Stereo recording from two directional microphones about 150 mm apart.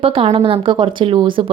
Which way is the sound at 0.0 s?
40° right (ahead or behind).